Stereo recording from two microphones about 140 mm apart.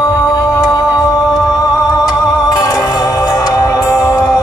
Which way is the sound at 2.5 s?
25° left (ahead or behind).